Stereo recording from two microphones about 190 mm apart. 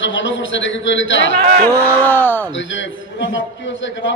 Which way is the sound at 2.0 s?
10° left (ahead or behind).